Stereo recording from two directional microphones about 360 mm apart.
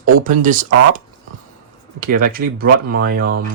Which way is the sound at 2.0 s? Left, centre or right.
Right.